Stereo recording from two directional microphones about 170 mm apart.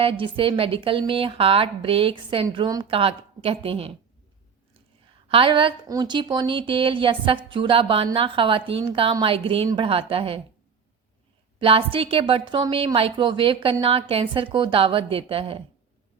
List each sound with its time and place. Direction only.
0.0 s speech: 30° right (ahead or behind)
5.3 s speech: 30° right (ahead or behind)
11.6 s speech: 30° right (ahead or behind)